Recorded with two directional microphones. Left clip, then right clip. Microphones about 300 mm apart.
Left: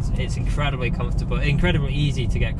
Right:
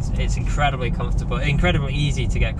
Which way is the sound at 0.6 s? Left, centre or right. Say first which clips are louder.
Right 4 dB; centre.